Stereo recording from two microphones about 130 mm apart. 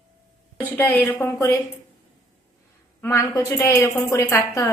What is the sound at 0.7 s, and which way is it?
Speech, 15° left (ahead or behind).